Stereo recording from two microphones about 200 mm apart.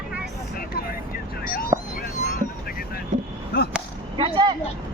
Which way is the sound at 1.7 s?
25° right (ahead or behind).